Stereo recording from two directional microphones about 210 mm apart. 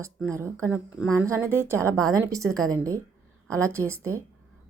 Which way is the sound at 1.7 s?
5° left (ahead or behind).